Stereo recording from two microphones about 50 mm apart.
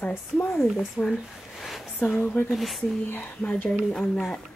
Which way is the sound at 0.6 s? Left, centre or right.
Centre.